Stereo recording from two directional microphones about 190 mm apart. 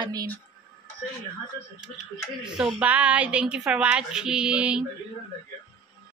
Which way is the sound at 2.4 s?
5° right (ahead or behind).